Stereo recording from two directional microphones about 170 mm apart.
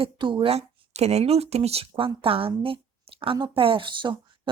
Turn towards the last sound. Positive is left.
turn(degrees=-30)  # may be behind; listen again after turning